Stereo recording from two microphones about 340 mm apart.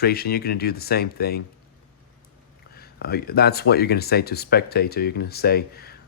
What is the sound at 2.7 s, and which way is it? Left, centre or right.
Speech, left.